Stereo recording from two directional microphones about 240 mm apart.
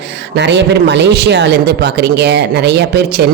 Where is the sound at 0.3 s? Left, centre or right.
Right.